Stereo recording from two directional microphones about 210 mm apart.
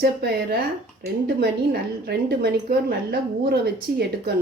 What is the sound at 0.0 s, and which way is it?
A woman's voice, 50° right (ahead or behind).